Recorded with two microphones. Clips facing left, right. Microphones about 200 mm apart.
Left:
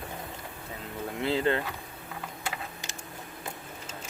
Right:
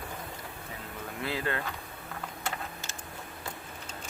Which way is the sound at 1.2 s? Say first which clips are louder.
Left 6 dB; 25° left (ahead or behind).